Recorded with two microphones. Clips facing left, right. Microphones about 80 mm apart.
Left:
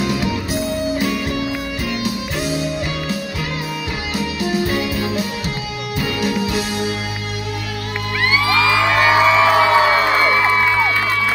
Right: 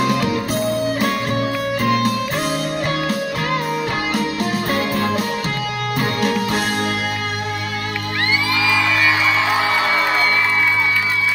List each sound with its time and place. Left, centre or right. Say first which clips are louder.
0.0 s music: right 2 dB; right
4.1 s music: right 1 dB; right
8.5 s music: left 4 dB; left
9.3 s music: left 5 dB; left